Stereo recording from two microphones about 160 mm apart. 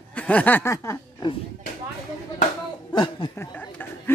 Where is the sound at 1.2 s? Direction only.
30° left (ahead or behind).